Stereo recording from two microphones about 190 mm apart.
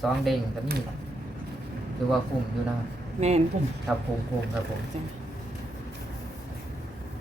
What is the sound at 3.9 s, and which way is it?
Speech, centre (ahead or behind).